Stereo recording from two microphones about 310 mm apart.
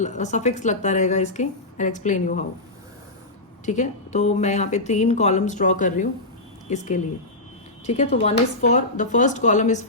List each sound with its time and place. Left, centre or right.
0.0 s a woman's voice: left
3.7 s a woman's voice: left